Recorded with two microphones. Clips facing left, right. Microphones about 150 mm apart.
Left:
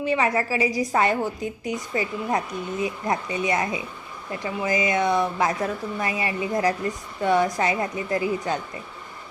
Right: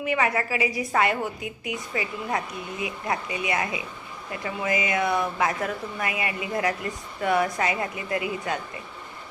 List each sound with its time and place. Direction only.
0.0 s a woman's voice: 30° left (ahead or behind)